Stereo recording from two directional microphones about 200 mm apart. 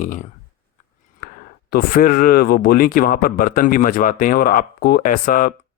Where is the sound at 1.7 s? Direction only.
50° left (ahead or behind).